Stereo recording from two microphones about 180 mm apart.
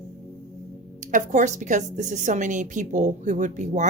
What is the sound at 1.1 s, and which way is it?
A woman's voice, 45° right (ahead or behind).